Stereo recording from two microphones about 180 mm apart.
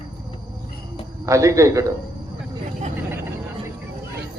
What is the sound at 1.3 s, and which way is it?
Speech, 15° right (ahead or behind).